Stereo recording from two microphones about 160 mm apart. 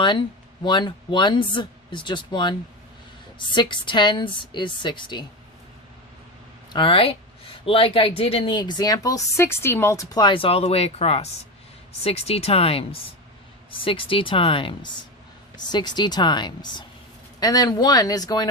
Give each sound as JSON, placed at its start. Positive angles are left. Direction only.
{"t": 0.0, "sound": "speech", "side_deg": 30}
{"t": 6.7, "sound": "speech", "side_deg": 35}